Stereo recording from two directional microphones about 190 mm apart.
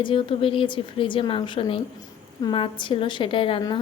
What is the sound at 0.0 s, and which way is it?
A woman's voice, 25° left (ahead or behind).